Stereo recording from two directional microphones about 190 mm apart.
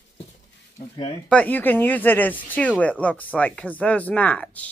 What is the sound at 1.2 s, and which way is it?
Speech, 5° left (ahead or behind).